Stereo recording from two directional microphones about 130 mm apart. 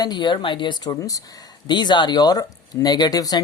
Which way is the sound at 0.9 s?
25° left (ahead or behind).